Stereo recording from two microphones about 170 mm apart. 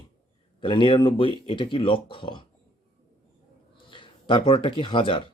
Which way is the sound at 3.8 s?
30° left (ahead or behind).